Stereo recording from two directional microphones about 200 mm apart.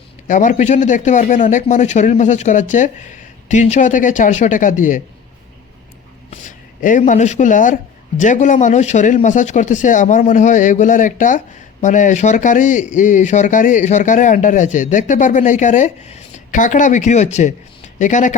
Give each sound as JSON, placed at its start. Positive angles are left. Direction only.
{"t": 0.3, "sound": "speech", "side_deg": 40}
{"t": 6.8, "sound": "speech", "side_deg": 40}